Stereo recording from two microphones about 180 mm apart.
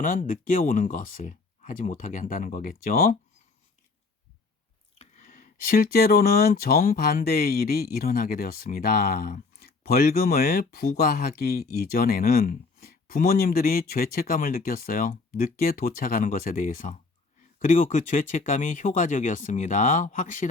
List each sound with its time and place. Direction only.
0.0 s speech: 45° left (ahead or behind)
4.9 s speech: 45° left (ahead or behind)